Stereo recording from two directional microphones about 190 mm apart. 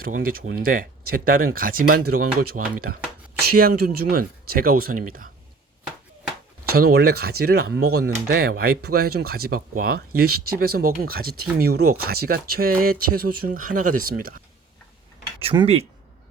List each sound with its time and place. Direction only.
0.0 s speech: 50° right (ahead or behind)
6.7 s speech: 55° right (ahead or behind)
15.4 s speech: 30° right (ahead or behind)